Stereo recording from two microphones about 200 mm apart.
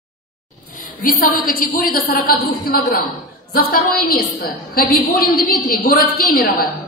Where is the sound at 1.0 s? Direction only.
45° left (ahead or behind).